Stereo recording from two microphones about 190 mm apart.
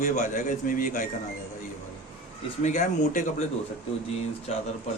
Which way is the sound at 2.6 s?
40° left (ahead or behind).